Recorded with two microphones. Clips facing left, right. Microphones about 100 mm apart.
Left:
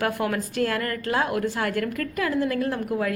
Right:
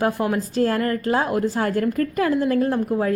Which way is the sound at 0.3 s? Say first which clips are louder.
Right 5 dB; 35° right (ahead or behind).